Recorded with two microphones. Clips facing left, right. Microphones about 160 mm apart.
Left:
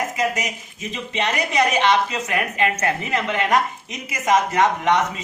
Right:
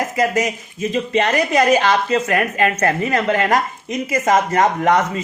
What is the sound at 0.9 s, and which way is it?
Speech, 45° right (ahead or behind).